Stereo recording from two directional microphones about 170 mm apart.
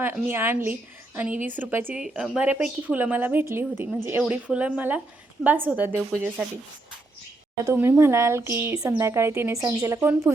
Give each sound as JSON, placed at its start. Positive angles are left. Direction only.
{"t": 0.0, "sound": "a woman's voice", "side_deg": -15}
{"t": 7.6, "sound": "a woman's voice", "side_deg": -15}